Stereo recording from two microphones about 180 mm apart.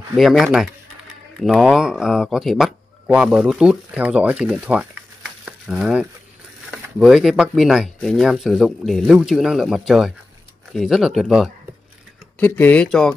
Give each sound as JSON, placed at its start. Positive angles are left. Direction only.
{"t": 0.1, "sound": "speech", "side_deg": 0}
{"t": 12.4, "sound": "speech", "side_deg": 10}